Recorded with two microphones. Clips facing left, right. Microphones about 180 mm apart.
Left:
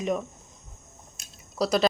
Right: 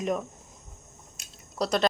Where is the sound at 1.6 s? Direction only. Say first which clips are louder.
Left 2 dB; 5° left (ahead or behind).